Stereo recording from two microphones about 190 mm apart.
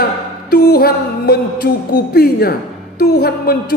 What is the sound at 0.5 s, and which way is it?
Music, 60° left (ahead or behind).